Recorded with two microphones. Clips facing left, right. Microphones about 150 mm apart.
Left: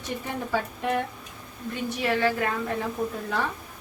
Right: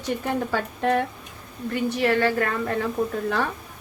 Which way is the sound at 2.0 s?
60° right (ahead or behind).